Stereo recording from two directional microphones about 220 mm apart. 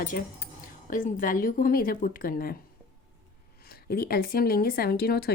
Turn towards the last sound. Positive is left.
turn(degrees=45)  # may be behind; listen again after turning